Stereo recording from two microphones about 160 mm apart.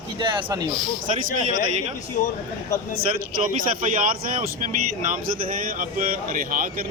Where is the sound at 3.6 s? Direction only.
55° right (ahead or behind).